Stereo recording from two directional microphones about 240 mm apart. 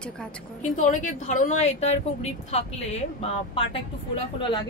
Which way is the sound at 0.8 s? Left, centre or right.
Left.